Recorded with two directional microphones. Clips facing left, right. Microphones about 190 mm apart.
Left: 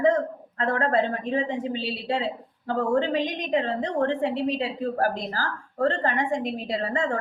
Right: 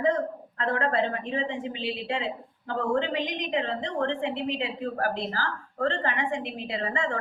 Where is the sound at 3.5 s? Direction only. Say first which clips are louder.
Left 5 dB; 40° left (ahead or behind).